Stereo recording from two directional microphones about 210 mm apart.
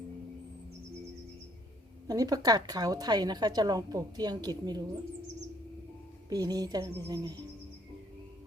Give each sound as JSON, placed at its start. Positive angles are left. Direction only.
{"t": 2.0, "sound": "a woman's voice", "side_deg": -15}
{"t": 6.2, "sound": "a woman's voice", "side_deg": -20}